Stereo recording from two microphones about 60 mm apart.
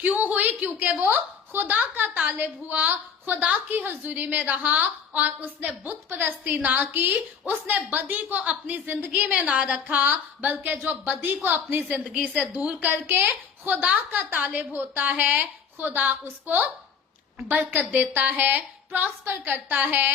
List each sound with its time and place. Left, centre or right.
0.0 s a woman's voice: right
8.9 s a woman's voice: right
10.1 s a woman's voice: right
12.5 s a woman's voice: right
12.9 s a woman's voice: right
13.8 s a woman's voice: right
14.2 s a woman's voice: right
17.5 s a woman's voice: right